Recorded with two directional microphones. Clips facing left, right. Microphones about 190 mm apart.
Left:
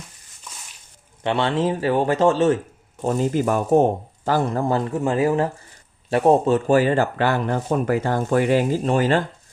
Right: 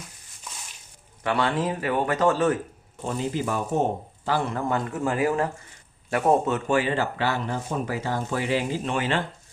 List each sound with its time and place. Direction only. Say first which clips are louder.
1.2 s speech: left 4 dB; 25° left (ahead or behind)
3.0 s a man's voice: left 7 dB; 45° left (ahead or behind)
4.9 s speech: left 4 dB; 25° left (ahead or behind); by 9.2 s 40° left (ahead or behind)